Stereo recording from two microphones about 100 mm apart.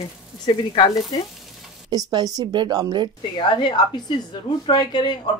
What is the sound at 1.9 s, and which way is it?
Speech, 40° right (ahead or behind).